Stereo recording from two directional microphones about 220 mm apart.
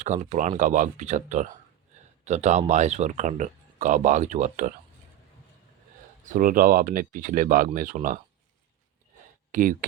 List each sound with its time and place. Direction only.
0.0 s speech: 30° right (ahead or behind)
6.2 s speech: 35° right (ahead or behind)
9.5 s speech: 35° right (ahead or behind)